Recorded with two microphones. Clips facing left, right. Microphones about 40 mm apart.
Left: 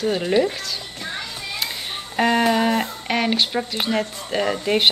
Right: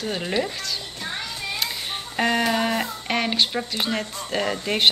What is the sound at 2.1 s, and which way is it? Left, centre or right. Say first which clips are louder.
Speech: left 4 dB; centre.